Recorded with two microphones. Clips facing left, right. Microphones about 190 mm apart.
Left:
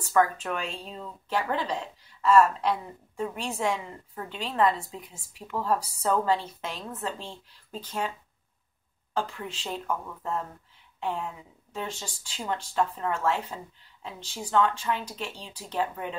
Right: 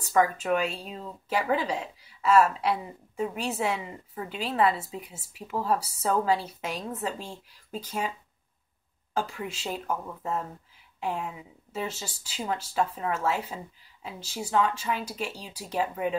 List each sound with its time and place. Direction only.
0.2 s speech: 5° right (ahead or behind)
9.1 s speech: 10° right (ahead or behind)